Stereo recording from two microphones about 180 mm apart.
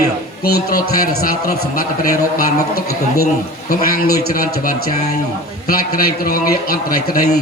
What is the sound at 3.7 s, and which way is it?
A man's voice, 55° left (ahead or behind).